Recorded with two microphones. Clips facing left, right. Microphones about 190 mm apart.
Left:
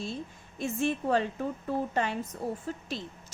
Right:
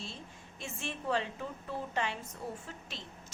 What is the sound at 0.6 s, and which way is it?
A woman's voice, 45° left (ahead or behind).